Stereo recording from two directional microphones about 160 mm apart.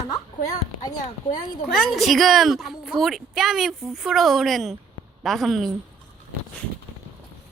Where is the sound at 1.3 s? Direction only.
25° left (ahead or behind).